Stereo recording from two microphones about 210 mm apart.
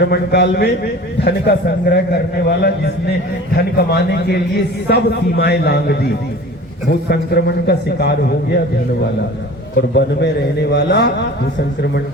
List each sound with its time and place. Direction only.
0.0 s a man's voice: 50° left (ahead or behind)
9.7 s a man's voice: 55° left (ahead or behind)